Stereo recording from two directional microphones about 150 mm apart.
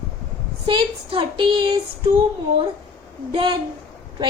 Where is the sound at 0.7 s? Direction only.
35° right (ahead or behind).